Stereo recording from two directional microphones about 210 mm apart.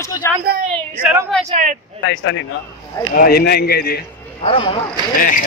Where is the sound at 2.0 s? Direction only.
65° left (ahead or behind).